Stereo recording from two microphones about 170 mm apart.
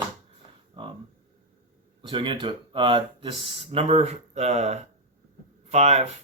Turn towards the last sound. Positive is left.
turn(degrees=-40)  # may be behind; listen again after turning